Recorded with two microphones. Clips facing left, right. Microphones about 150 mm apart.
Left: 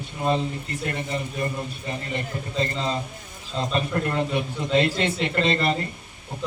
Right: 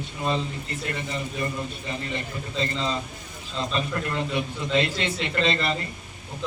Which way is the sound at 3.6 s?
45° left (ahead or behind).